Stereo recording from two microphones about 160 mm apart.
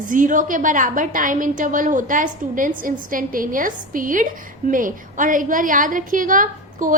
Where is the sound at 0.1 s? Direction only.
55° right (ahead or behind).